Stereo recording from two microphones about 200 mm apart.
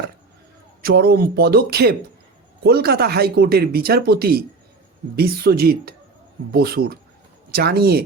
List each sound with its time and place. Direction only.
0.8 s speech: 50° right (ahead or behind)